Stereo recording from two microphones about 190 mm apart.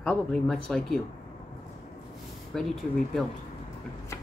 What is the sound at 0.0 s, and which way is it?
Speech, 5° left (ahead or behind).